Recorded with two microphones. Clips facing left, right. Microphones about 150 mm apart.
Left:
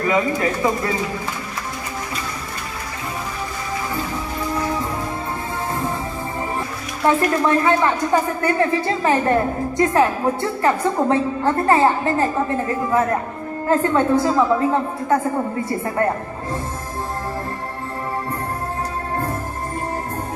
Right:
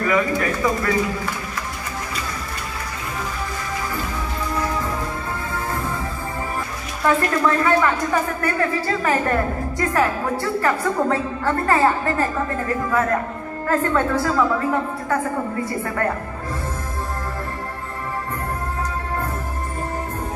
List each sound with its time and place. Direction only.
0.0 s speech: 25° left (ahead or behind)
7.2 s speech: 25° left (ahead or behind)